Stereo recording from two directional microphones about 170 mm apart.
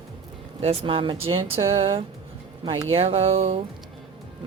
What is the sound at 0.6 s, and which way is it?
Speech, 35° right (ahead or behind).